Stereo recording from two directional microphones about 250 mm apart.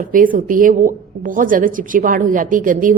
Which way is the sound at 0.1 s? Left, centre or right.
Right.